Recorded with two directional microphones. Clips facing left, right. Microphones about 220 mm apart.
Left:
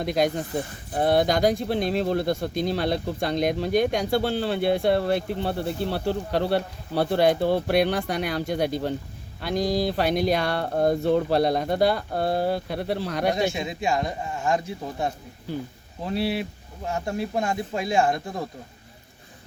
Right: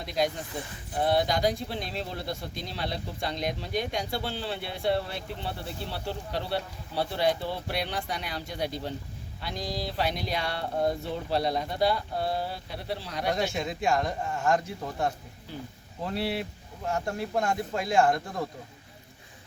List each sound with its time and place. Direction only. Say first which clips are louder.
0.0 s speech: left 6 dB; 50° left (ahead or behind)
13.3 s a man's voice: left 4 dB; 10° left (ahead or behind)
16.1 s speech: left 5 dB; 20° right (ahead or behind)
17.3 s a man's voice: right 1 dB; 15° left (ahead or behind)